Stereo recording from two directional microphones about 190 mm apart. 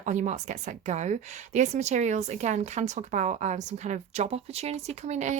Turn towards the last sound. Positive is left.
turn(degrees=-40)  # may be behind; listen again after turning